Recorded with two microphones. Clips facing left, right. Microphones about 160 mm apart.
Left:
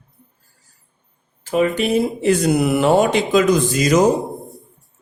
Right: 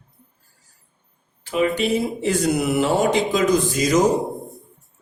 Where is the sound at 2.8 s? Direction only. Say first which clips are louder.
Left 3 dB; 70° left (ahead or behind).